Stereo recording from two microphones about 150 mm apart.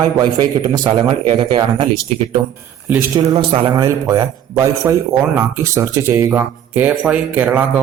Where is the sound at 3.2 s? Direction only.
40° right (ahead or behind).